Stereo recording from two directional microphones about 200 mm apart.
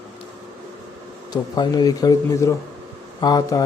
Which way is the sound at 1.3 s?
20° left (ahead or behind).